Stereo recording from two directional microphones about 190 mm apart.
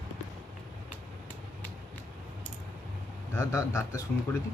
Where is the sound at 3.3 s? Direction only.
15° left (ahead or behind).